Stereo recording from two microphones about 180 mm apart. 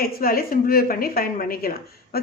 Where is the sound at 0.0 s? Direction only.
55° left (ahead or behind).